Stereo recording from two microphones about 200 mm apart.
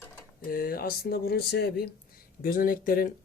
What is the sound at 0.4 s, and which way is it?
Speech, 45° left (ahead or behind).